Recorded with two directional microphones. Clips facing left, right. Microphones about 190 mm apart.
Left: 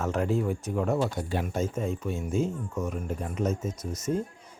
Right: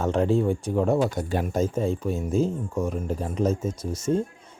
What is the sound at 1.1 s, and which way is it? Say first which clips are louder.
Speech: right 4 dB; 45° right (ahead or behind).